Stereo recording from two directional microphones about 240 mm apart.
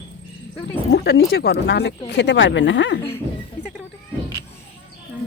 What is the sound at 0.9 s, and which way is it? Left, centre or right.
Speech, left.